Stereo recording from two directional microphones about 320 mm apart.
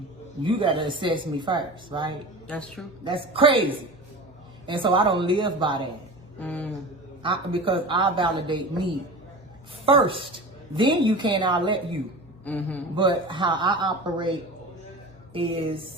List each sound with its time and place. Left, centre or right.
0.4 s a man's voice: centre
2.5 s a woman's voice: centre
3.0 s a man's voice: centre
6.4 s a woman's voice: centre
7.2 s a man's voice: centre
12.5 s a woman's voice: centre
13.0 s a man's voice: centre